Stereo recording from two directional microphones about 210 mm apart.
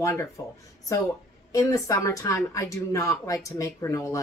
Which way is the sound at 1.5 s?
15° left (ahead or behind).